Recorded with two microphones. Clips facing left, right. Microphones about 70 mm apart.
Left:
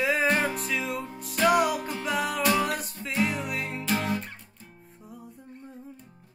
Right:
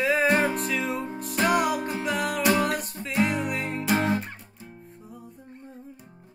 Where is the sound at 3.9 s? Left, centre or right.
Right.